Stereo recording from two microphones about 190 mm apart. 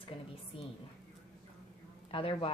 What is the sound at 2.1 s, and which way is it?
Speech, 30° left (ahead or behind).